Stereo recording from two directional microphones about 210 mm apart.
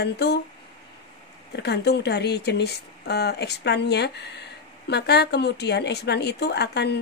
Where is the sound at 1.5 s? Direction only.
50° left (ahead or behind).